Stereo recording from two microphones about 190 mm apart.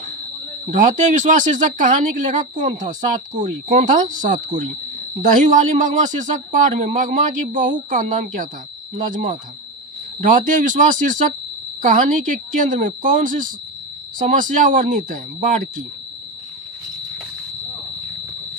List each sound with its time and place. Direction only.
0.7 s speech: 40° right (ahead or behind)